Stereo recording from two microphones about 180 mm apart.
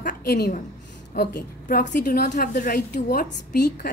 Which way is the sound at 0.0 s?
60° left (ahead or behind).